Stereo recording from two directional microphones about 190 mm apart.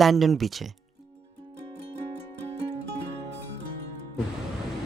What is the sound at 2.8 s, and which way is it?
Music, 65° right (ahead or behind).